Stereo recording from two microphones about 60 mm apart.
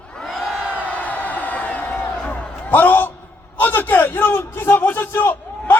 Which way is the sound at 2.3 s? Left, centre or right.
Left.